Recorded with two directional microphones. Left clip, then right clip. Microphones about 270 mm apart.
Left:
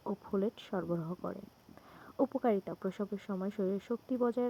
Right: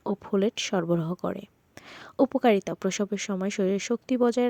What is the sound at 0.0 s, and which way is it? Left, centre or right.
Speech, right.